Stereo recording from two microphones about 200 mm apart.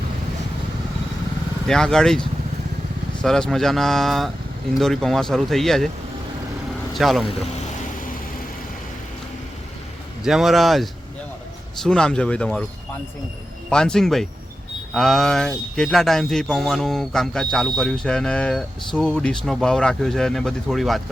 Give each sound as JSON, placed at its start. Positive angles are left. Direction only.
{"t": 1.6, "sound": "speech", "side_deg": 5}
{"t": 6.9, "sound": "speech", "side_deg": 0}
{"t": 10.2, "sound": "speech", "side_deg": 0}
{"t": 13.7, "sound": "speech", "side_deg": 5}